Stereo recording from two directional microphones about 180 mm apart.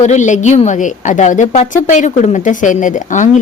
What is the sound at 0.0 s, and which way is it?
Speech, 40° left (ahead or behind).